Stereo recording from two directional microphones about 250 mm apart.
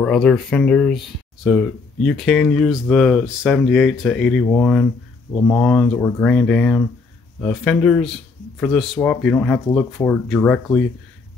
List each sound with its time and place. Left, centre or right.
0.0 s speech: centre